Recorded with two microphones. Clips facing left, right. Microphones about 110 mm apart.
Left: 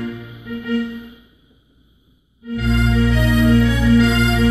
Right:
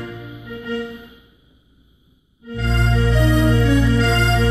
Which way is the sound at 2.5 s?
5° left (ahead or behind).